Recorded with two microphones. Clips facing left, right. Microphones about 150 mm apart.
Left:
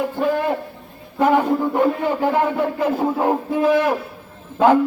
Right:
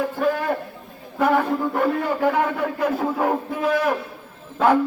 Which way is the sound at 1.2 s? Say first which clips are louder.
Left 3 dB; 20° left (ahead or behind).